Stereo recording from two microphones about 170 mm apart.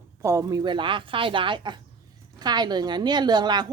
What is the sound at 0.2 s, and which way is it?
A woman's voice, 15° right (ahead or behind).